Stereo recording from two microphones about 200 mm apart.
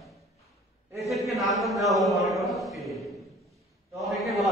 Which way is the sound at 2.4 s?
Centre (ahead or behind).